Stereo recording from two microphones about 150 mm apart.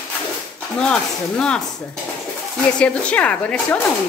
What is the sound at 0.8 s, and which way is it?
Speech, 5° left (ahead or behind).